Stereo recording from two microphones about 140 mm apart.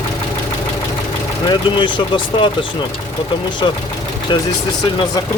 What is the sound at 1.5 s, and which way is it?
Speech, 35° left (ahead or behind).